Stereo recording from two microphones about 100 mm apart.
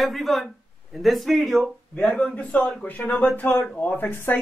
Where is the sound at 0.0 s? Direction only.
Centre (ahead or behind).